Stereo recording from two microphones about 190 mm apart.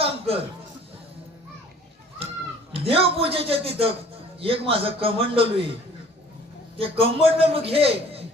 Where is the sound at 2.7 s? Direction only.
30° right (ahead or behind).